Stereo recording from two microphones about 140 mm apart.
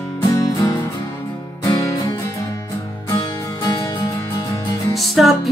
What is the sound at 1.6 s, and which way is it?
Music, 25° left (ahead or behind).